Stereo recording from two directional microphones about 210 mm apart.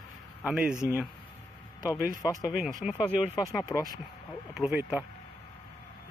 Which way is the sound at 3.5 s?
15° left (ahead or behind).